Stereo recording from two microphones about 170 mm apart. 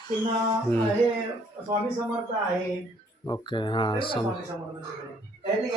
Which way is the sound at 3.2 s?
25° left (ahead or behind).